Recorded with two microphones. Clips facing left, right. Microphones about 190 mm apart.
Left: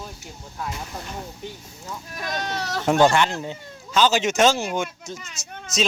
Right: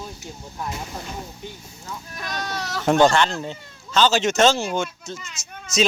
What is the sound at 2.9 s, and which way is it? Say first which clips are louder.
Speech: right 1 dB; 5° left (ahead or behind).